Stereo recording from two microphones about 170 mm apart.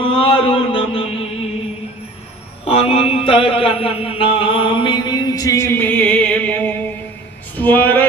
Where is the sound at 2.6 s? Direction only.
35° left (ahead or behind); by 6.7 s 10° left (ahead or behind).